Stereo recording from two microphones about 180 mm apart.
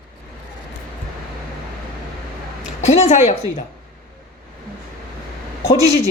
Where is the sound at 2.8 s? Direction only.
40° left (ahead or behind).